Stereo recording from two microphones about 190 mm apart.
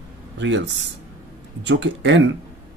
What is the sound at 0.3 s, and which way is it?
Speech, 75° right (ahead or behind).